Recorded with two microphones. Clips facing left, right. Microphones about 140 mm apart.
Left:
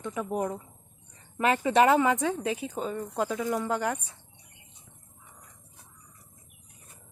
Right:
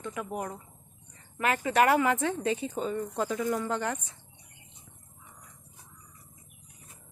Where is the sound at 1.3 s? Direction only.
25° left (ahead or behind); by 4.0 s 10° left (ahead or behind).